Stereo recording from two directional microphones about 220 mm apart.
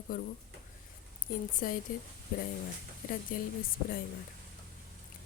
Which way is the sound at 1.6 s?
40° left (ahead or behind).